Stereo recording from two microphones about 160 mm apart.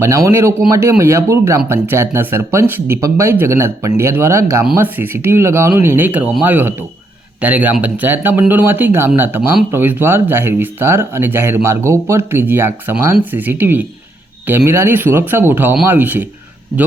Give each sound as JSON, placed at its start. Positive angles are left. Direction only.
{"t": 0.0, "sound": "speech", "side_deg": -20}